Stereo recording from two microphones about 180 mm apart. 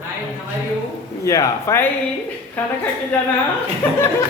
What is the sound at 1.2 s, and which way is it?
Speech, 15° left (ahead or behind).